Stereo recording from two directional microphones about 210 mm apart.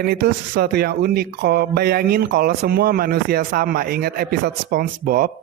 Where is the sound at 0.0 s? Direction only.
50° right (ahead or behind).